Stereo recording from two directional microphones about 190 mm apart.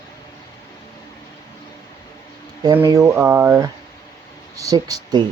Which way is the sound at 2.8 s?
15° right (ahead or behind).